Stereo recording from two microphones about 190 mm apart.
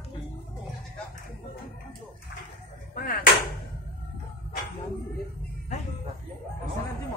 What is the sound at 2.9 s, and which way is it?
Chop, 45° left (ahead or behind).